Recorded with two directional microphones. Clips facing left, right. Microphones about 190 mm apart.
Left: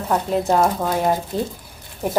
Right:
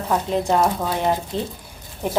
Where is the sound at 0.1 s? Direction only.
5° left (ahead or behind).